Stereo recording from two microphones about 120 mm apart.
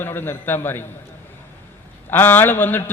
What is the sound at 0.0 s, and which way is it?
Speech, 15° left (ahead or behind).